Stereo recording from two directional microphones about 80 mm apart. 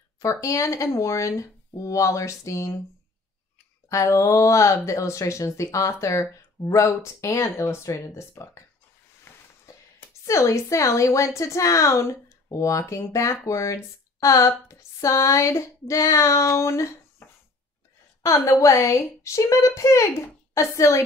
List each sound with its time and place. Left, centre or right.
0.2 s a woman's voice: left
3.9 s a woman's voice: left
18.2 s a woman's voice: left